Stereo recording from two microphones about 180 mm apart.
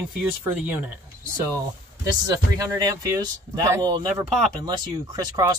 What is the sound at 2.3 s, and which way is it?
Speech, 20° right (ahead or behind).